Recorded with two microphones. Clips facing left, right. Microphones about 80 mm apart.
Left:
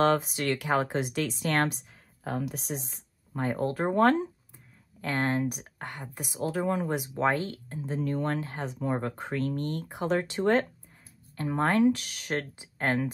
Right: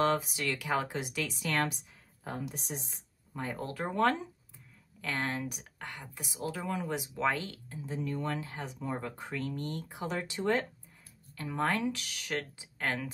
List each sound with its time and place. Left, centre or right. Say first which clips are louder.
0.0 s speech: left 5 dB; left
2.2 s speech: left 6 dB; left
3.3 s speech: left 8 dB; left
11.3 s speech: left 6 dB; left